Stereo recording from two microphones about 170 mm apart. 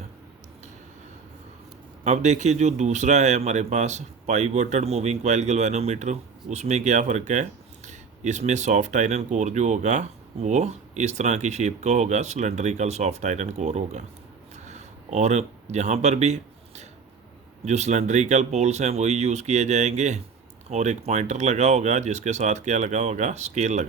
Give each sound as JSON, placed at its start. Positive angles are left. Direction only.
{"t": 2.0, "sound": "speech", "side_deg": -45}
{"t": 14.5, "sound": "a sound", "side_deg": -40}
{"t": 17.7, "sound": "speech", "side_deg": -40}